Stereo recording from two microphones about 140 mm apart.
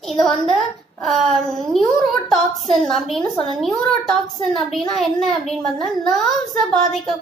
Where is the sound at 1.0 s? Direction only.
Centre (ahead or behind).